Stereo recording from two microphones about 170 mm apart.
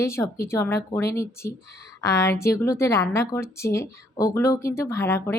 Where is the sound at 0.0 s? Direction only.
15° left (ahead or behind).